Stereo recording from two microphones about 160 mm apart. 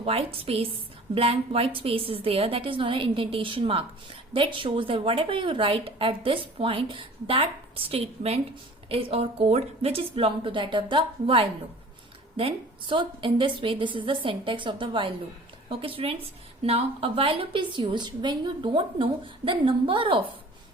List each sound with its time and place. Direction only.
0.0 s a woman's voice: 35° right (ahead or behind)